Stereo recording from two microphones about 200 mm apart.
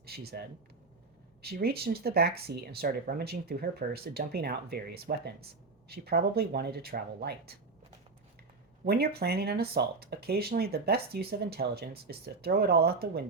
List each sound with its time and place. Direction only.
0.0 s speech: 50° right (ahead or behind)
8.8 s speech: 50° right (ahead or behind)